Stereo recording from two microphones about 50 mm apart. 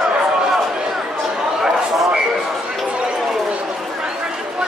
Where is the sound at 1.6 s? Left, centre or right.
Centre.